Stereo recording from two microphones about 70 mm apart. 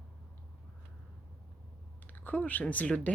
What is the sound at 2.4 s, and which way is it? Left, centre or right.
Speech, left.